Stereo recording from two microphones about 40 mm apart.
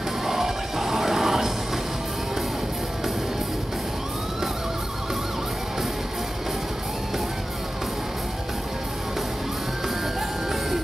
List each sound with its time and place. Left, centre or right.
0.3 s music: centre